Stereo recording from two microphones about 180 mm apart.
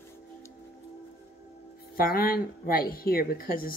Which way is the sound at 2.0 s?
55° left (ahead or behind).